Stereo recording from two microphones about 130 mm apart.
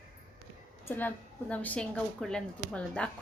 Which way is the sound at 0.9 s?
15° left (ahead or behind).